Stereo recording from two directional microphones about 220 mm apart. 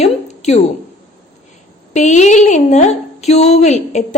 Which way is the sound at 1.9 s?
30° left (ahead or behind).